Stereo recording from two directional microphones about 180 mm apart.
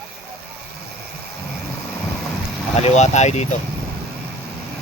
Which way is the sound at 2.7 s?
40° left (ahead or behind).